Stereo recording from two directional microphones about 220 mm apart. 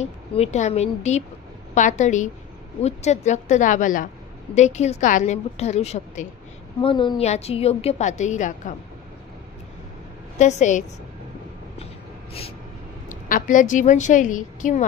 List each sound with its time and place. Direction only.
0.0 s a woman's voice: 30° left (ahead or behind)
10.4 s a woman's voice: 30° left (ahead or behind)
13.3 s a woman's voice: 35° left (ahead or behind)